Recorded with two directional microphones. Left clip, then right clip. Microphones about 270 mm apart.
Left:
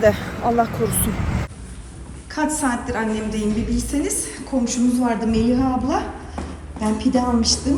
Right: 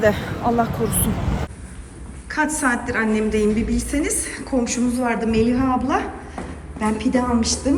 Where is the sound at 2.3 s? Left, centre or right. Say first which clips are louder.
Right 2 dB; centre.